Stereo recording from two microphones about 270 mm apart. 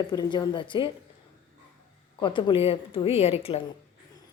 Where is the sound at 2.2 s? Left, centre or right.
Centre.